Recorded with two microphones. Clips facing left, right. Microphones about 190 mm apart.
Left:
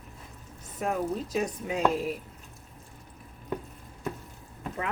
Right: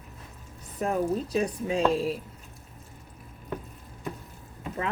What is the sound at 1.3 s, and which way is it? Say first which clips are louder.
Speech: right 3 dB; 30° right (ahead or behind).